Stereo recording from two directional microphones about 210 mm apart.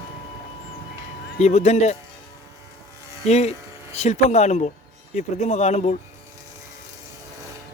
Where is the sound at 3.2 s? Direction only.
30° left (ahead or behind).